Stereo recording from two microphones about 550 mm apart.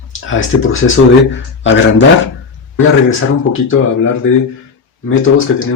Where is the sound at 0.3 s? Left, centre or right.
Left.